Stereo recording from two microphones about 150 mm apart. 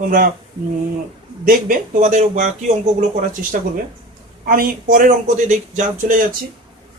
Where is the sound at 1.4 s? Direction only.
65° right (ahead or behind).